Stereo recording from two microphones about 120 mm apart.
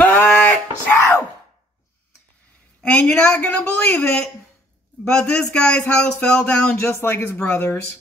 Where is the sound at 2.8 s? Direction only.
10° left (ahead or behind).